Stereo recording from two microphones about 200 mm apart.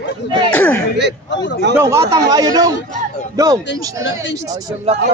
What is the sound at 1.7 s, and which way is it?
Speech, 15° right (ahead or behind).